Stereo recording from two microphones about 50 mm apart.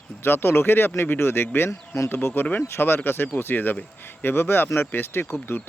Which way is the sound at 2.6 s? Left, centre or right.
Left.